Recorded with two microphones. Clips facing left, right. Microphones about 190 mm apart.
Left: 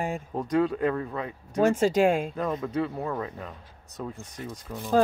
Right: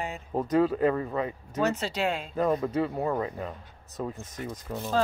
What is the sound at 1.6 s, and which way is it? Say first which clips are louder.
Speech: left 7 dB; 50° left (ahead or behind).